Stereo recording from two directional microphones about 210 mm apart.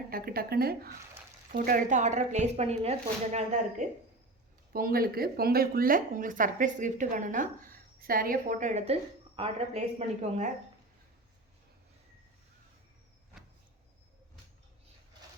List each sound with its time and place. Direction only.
0.1 s a woman's voice: 45° right (ahead or behind)
4.7 s a woman's voice: 45° right (ahead or behind); by 9.8 s 25° right (ahead or behind)